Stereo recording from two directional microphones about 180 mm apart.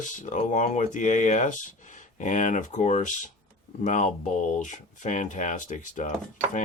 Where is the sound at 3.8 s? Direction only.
45° left (ahead or behind).